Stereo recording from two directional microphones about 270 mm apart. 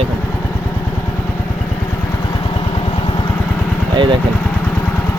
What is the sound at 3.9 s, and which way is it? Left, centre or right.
Speech, centre.